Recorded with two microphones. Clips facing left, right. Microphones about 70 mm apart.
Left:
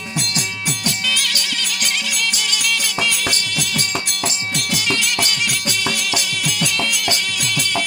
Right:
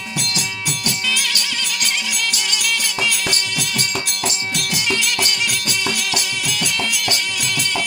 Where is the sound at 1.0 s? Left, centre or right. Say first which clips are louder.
Right 1 dB; centre.